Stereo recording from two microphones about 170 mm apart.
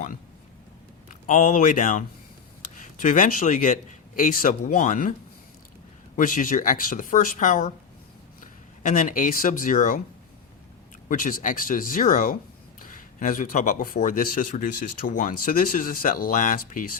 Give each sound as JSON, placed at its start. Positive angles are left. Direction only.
{"t": 1.0, "sound": "speech", "side_deg": 50}
{"t": 6.1, "sound": "speech", "side_deg": 50}
{"t": 8.8, "sound": "speech", "side_deg": 50}
{"t": 11.1, "sound": "speech", "side_deg": 50}